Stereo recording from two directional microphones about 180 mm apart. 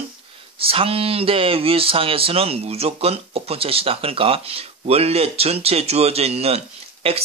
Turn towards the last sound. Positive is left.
turn(degrees=-30)  # may be behind; listen again after turning